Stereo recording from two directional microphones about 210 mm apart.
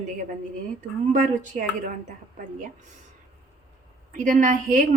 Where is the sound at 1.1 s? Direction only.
40° right (ahead or behind).